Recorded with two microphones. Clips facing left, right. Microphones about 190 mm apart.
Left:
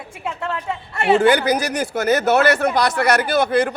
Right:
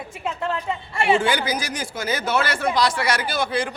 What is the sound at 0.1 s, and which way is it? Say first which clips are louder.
Speech: even; 5° left (ahead or behind).